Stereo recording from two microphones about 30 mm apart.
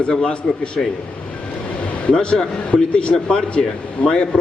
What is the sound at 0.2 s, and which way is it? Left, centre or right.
Speech, left.